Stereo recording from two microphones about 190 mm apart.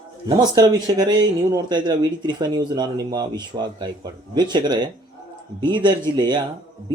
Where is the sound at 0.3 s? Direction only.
20° right (ahead or behind).